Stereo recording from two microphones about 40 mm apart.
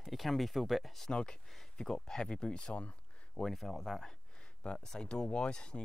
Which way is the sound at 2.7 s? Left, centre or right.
Left.